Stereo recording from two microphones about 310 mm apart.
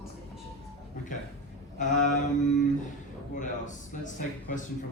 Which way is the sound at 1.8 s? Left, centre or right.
Left.